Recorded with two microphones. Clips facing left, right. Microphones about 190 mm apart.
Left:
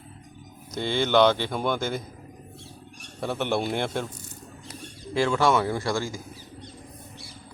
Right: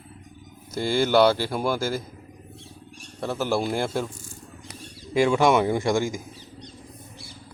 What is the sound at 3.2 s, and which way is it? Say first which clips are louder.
Speech: right 1 dB; centre (ahead or behind).